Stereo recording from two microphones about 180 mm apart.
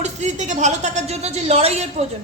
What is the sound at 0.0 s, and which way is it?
A woman's voice, 40° right (ahead or behind).